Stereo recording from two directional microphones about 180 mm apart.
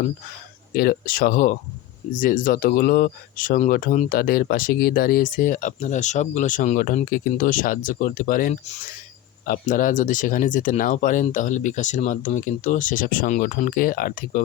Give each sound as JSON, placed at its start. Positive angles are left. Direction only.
{"t": 0.7, "sound": "speech", "side_deg": 55}